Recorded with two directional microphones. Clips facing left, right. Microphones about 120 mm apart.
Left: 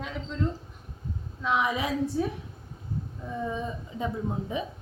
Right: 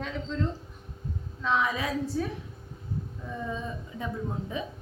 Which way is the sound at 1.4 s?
15° left (ahead or behind).